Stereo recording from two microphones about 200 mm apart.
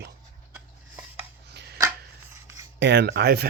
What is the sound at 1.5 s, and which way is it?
Chopping, 55° right (ahead or behind).